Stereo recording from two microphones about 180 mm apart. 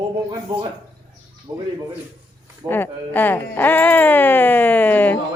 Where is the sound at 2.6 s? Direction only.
10° left (ahead or behind).